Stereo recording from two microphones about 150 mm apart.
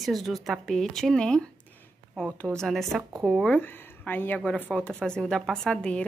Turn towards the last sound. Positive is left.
turn(degrees=5)  # may be behind; listen again after turning